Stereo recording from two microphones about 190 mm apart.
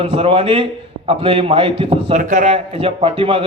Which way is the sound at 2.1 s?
40° right (ahead or behind).